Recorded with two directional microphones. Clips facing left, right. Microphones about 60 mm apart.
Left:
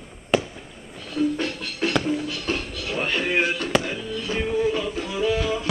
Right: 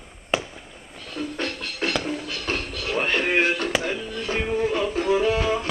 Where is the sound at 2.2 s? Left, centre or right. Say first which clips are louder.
Left 1 dB; right.